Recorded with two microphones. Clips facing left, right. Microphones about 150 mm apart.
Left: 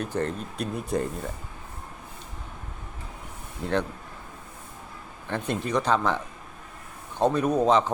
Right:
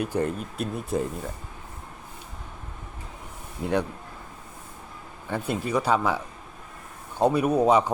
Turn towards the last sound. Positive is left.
turn(degrees=-10)  # may be behind; listen again after turning